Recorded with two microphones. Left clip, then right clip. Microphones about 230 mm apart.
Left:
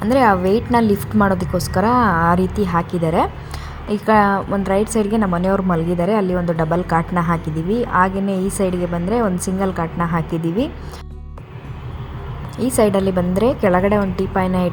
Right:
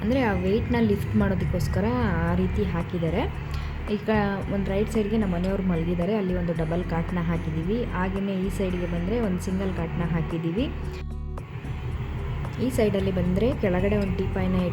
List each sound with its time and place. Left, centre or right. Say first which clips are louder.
0.1 s speech: left 11 dB; left
12.5 s speech: left 9 dB; left